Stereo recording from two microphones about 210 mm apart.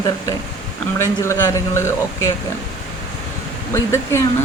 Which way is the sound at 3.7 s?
10° left (ahead or behind).